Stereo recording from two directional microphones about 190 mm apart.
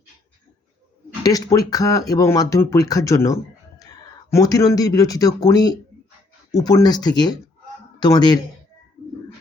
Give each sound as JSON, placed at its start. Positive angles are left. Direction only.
{"t": 1.2, "sound": "speech", "side_deg": 20}